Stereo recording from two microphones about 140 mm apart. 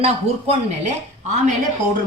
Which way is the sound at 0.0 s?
50° right (ahead or behind).